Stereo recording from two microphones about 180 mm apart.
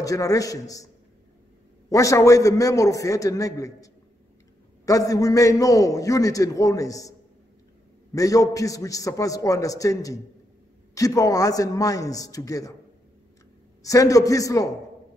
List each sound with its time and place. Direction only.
0.0 s a man's voice: 20° left (ahead or behind)
1.9 s a man's voice: 15° left (ahead or behind)
13.8 s a man's voice: 20° left (ahead or behind)